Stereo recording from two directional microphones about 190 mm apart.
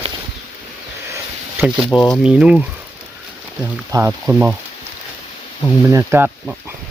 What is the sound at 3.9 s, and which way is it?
Speech, 15° right (ahead or behind).